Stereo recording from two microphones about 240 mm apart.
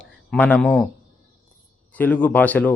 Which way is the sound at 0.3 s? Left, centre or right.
Centre.